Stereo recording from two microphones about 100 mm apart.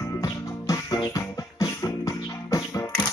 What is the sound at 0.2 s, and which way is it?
Music, 40° left (ahead or behind).